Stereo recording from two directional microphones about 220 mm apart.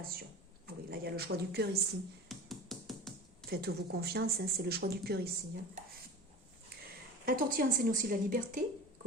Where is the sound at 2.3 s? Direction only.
Centre (ahead or behind).